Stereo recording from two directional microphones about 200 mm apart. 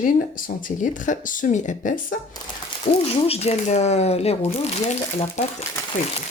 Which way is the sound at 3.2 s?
30° left (ahead or behind).